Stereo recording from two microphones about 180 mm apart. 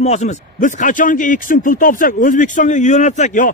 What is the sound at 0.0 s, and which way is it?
Speech, 40° left (ahead or behind).